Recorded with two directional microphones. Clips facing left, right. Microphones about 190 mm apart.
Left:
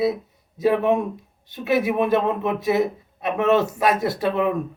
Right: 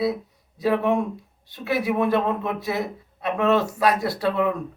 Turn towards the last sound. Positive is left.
turn(degrees=20)  # may be behind; listen again after turning